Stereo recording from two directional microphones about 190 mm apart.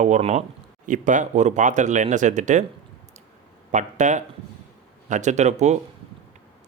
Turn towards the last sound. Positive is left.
turn(degrees=-35)  # may be behind; listen again after turning